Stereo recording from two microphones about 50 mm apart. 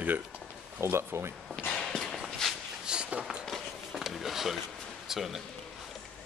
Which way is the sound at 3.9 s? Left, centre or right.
Centre.